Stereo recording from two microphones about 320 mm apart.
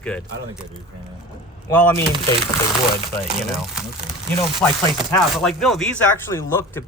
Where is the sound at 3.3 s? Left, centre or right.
Centre.